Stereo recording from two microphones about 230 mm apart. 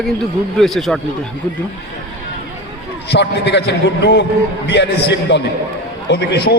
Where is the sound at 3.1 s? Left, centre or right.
Left.